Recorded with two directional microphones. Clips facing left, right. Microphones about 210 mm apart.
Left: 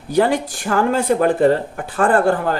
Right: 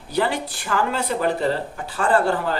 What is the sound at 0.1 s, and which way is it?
Speech, 45° left (ahead or behind).